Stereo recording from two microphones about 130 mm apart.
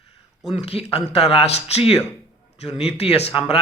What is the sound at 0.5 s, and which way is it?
Speech, 50° left (ahead or behind).